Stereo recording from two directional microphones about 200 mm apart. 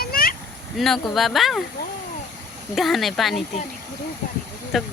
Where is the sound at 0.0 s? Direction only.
45° left (ahead or behind).